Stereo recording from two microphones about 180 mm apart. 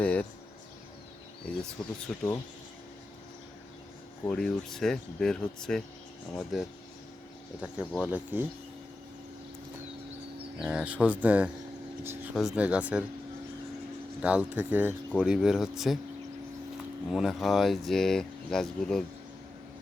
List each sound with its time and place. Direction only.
0.0 s insect: 5° left (ahead or behind)
1.8 s speech: 20° left (ahead or behind)
4.3 s speech: 5° left (ahead or behind)
10.6 s speech: 5° right (ahead or behind)
12.3 s speech: centre (ahead or behind)
14.2 s speech: 5° right (ahead or behind)
17.1 s speech: centre (ahead or behind)